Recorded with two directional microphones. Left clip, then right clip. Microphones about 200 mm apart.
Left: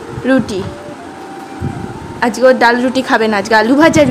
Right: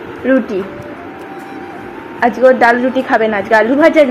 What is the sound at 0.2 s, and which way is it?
Speech, 30° left (ahead or behind).